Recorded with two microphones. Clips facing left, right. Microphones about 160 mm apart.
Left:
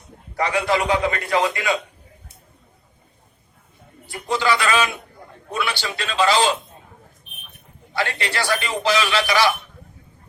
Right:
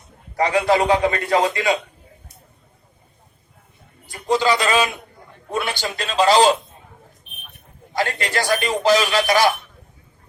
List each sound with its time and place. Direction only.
0.3 s a man's voice: 35° right (ahead or behind)
4.0 s a man's voice: 40° right (ahead or behind)
4.4 s a man's voice: 30° right (ahead or behind)
5.5 s a man's voice: 45° right (ahead or behind)
7.9 s a man's voice: 45° right (ahead or behind)